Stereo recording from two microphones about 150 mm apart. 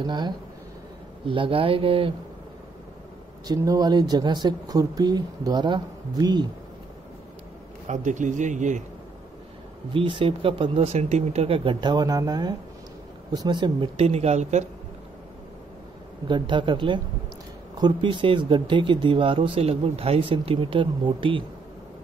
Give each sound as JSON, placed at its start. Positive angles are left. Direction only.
{"t": 0.0, "sound": "speech", "side_deg": -30}
{"t": 3.4, "sound": "speech", "side_deg": -25}
{"t": 7.9, "sound": "speech", "side_deg": -55}
{"t": 9.9, "sound": "speech", "side_deg": -35}
{"t": 16.3, "sound": "speech", "side_deg": -30}